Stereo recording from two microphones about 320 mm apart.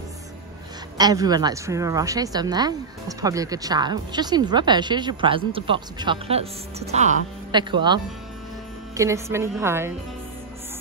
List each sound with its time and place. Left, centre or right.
0.9 s a woman's voice: centre